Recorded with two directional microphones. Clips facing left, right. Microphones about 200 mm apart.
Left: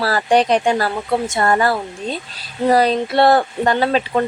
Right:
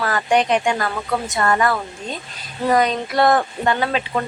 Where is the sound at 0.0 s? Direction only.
35° left (ahead or behind).